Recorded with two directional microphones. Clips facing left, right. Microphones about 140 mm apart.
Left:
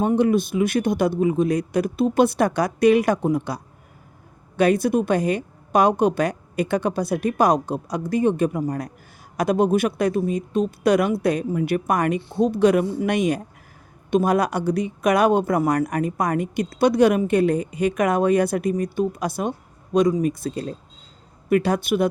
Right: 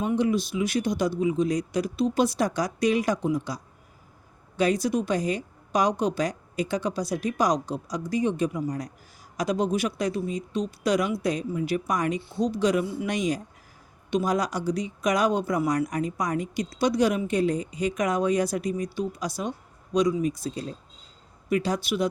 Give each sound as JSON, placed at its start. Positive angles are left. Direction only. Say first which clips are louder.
{"t": 0.0, "sound": "a woman's voice", "louder": "left 6 dB", "side_deg": 50}